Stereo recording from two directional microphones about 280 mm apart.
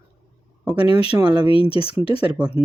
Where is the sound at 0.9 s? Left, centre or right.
Centre.